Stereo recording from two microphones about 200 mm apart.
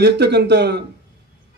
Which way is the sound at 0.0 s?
55° right (ahead or behind).